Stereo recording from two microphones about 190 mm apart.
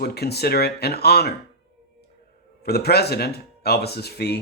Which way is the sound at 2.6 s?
55° left (ahead or behind).